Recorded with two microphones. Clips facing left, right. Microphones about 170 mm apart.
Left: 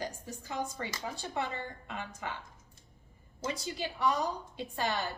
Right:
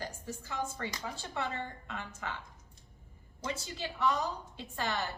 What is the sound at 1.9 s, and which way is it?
Speech, 15° left (ahead or behind).